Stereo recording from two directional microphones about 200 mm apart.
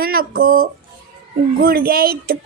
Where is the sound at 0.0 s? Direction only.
50° right (ahead or behind).